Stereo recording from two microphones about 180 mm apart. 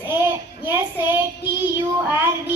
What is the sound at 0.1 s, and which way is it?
Child singing, 10° right (ahead or behind).